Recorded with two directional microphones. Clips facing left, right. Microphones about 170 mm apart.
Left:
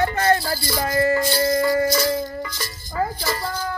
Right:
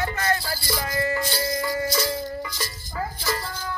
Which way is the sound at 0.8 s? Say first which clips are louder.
Left 8 dB; 50° left (ahead or behind).